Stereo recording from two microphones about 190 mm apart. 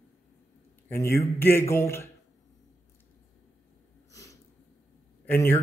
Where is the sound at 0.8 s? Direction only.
15° left (ahead or behind).